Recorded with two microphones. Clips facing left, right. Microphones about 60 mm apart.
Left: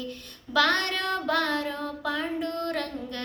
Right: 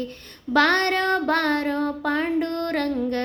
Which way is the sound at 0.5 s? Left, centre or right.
Right.